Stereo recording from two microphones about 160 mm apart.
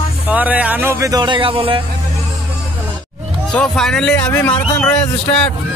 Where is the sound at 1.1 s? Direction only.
30° right (ahead or behind).